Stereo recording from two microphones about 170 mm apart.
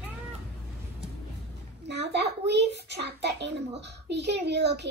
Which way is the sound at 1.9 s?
85° right.